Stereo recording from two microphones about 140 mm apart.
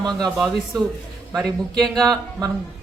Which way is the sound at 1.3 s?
Centre (ahead or behind).